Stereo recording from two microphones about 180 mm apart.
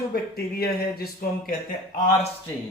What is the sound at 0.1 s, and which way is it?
Speech, 55° left (ahead or behind).